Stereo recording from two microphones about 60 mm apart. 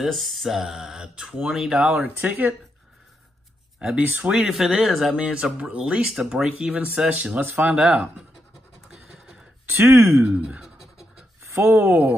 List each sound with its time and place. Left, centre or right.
0.0 s speech: centre
1.0 s speech: centre
2.0 s speech: right
3.8 s speech: centre
4.4 s speech: centre
5.1 s speech: centre
7.3 s speech: right
7.7 s speech: centre
8.9 s a sound: centre
9.8 s speech: right
10.2 s speech: right
11.5 s speech: right